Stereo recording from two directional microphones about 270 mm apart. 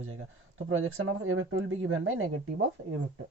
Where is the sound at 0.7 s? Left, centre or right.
Right.